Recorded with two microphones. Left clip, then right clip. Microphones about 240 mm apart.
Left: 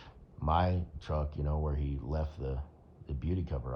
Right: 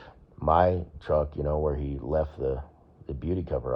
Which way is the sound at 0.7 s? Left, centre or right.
Right.